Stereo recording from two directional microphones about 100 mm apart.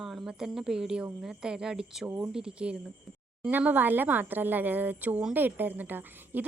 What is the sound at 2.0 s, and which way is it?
Speech, 20° right (ahead or behind).